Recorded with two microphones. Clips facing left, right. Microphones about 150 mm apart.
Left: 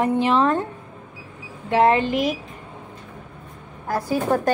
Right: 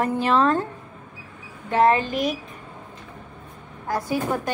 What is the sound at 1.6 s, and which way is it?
Speech, 25° left (ahead or behind).